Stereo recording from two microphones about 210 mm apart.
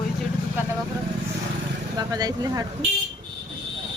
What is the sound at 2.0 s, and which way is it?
Speech, 20° right (ahead or behind).